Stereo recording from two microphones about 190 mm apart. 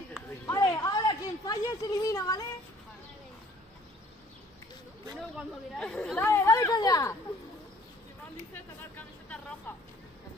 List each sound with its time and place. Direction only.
0.5 s a sound: 20° left (ahead or behind)
5.3 s speech: 5° left (ahead or behind); by 7.2 s 20° left (ahead or behind)
9.7 s speech: 10° left (ahead or behind)